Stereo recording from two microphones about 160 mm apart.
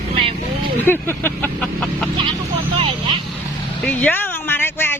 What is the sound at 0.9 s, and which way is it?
Vehicle, 15° left (ahead or behind).